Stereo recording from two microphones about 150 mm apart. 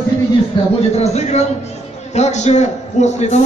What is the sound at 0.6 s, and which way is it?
Speech, 35° left (ahead or behind).